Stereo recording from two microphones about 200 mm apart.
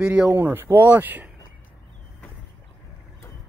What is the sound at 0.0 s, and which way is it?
Speech, 5° right (ahead or behind).